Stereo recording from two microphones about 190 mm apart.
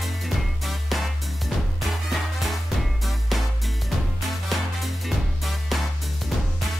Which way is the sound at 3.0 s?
Centre (ahead or behind).